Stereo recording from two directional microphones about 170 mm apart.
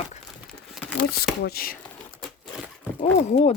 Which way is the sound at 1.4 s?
60° left (ahead or behind).